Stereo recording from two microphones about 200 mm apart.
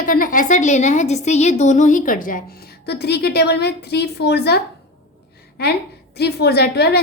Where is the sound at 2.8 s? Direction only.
55° left (ahead or behind).